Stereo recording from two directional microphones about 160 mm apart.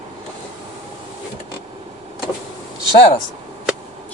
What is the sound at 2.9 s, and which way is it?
Speech, 35° left (ahead or behind).